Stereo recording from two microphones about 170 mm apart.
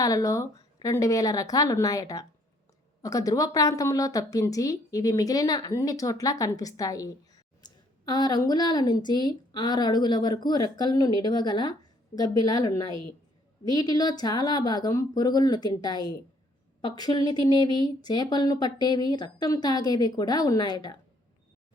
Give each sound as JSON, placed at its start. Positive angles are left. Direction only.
{"t": 0.0, "sound": "a woman's voice", "side_deg": 20}